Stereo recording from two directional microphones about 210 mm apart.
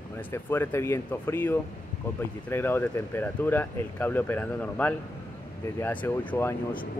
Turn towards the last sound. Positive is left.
turn(degrees=10)  # may be behind; listen again after turning